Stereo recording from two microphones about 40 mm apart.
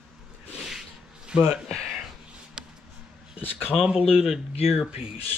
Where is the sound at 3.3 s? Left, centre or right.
Left.